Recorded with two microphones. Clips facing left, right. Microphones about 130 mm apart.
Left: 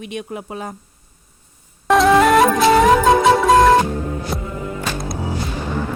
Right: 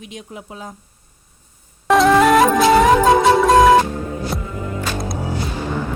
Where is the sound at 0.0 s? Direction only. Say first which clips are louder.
Left 6 dB; 60° left (ahead or behind).